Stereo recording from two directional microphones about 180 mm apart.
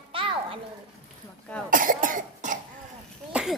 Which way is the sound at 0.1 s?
30° right (ahead or behind).